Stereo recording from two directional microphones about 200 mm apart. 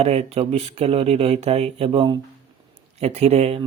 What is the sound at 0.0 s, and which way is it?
Speech, 30° right (ahead or behind).